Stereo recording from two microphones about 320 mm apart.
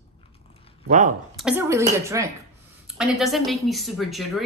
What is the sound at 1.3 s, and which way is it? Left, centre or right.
A woman's voice, centre.